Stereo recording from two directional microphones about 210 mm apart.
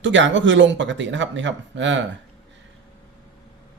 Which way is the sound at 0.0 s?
60° right (ahead or behind).